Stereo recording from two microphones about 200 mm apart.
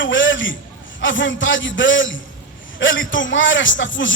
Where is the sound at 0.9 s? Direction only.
70° left (ahead or behind).